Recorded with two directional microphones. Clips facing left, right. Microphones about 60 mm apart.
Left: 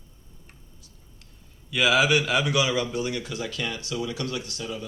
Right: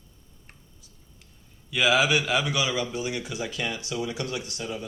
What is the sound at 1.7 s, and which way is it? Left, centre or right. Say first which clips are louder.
A man's voice: left 1 dB; centre.